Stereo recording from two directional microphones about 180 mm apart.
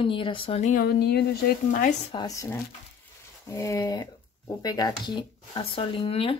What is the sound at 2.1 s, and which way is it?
Speech, 20° left (ahead or behind).